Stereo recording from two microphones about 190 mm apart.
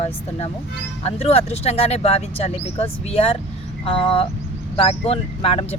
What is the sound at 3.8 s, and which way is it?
Vehicle, 30° left (ahead or behind).